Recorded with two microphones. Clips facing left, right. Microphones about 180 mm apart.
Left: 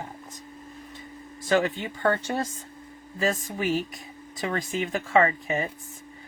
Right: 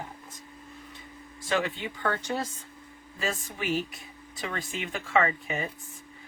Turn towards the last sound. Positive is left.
turn(degrees=40)  # may be behind; listen again after turning